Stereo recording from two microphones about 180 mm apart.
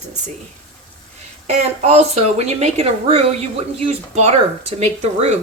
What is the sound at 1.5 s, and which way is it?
Speech, 35° right (ahead or behind).